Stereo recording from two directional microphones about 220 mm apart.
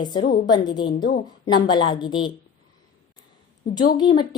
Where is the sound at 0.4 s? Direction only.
20° left (ahead or behind).